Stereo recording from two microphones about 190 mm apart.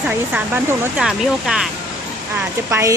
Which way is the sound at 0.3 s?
10° right (ahead or behind).